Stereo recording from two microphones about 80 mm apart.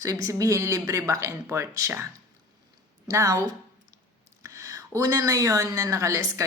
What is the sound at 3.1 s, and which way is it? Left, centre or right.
A woman's voice, right.